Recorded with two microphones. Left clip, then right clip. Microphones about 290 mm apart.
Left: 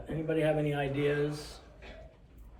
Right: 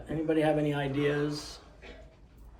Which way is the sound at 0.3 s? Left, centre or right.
Right.